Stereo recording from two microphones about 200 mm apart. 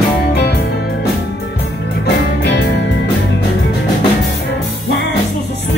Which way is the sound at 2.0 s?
60° left (ahead or behind).